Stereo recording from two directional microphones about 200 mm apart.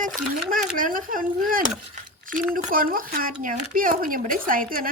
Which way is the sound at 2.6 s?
45° right (ahead or behind).